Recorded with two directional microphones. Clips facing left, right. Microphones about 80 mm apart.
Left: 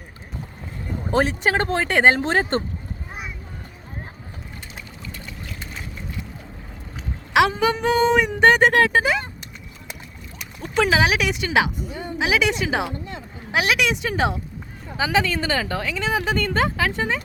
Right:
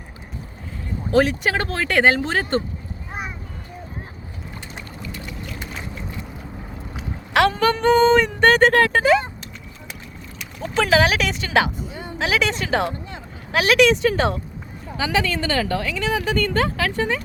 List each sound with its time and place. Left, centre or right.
1.1 s speech: left
5.1 s boat: centre
7.3 s speech: centre
10.3 s speech: centre
14.9 s speech: centre